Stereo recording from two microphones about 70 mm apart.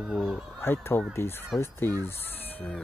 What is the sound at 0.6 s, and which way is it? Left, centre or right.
Speech, left.